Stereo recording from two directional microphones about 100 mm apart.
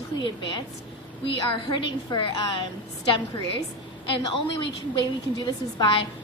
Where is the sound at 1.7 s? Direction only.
50° left (ahead or behind).